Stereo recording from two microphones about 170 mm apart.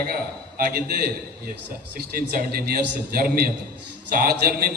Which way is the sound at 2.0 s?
60° right (ahead or behind).